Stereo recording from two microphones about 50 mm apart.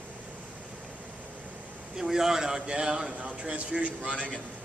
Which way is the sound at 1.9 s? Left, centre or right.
Centre.